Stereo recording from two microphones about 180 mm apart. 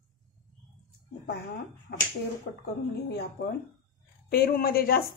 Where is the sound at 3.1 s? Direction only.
65° left (ahead or behind).